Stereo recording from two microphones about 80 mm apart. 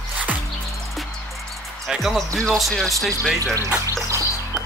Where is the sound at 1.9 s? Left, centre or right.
Centre.